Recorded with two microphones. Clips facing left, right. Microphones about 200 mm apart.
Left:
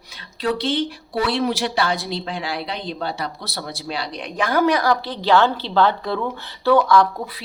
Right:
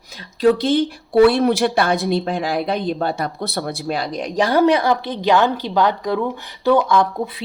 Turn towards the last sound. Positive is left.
turn(degrees=-20)  # may be behind; listen again after turning